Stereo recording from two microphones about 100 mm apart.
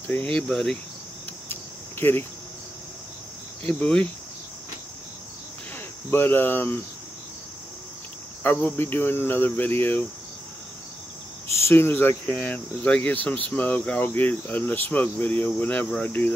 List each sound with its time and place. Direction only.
0.3 s speech: 10° left (ahead or behind)
1.5 s cricket: 20° left (ahead or behind)
3.6 s speech: 10° left (ahead or behind)
6.0 s cricket: 20° left (ahead or behind)
8.4 s cricket: 20° left (ahead or behind)
11.6 s speech: 20° left (ahead or behind)